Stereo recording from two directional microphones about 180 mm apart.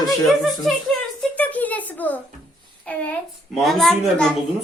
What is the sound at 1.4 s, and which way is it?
A child's voice, 10° left (ahead or behind).